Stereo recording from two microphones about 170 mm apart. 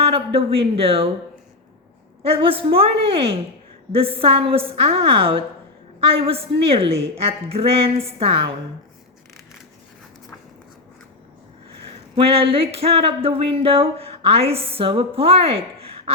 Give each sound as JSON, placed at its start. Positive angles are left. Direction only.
{"t": 0.0, "sound": "speech", "side_deg": -35}
{"t": 2.2, "sound": "speech", "side_deg": -35}
{"t": 12.1, "sound": "speech", "side_deg": -35}